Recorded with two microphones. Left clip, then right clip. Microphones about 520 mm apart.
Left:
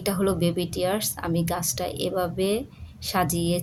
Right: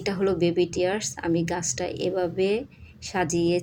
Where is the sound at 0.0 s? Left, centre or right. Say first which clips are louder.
Right 1 dB; left.